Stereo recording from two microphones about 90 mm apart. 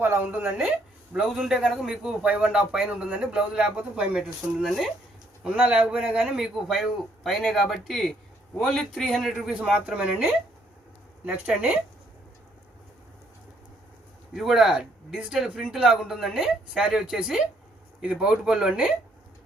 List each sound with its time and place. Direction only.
0.0 s a man's voice: 25° right (ahead or behind)
1.3 s a man's voice: 5° right (ahead or behind)
5.4 s a man's voice: 10° right (ahead or behind)
11.3 s a man's voice: 15° right (ahead or behind)
14.3 s a man's voice: 5° right (ahead or behind)